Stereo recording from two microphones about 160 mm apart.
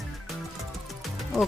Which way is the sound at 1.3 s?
Centre (ahead or behind).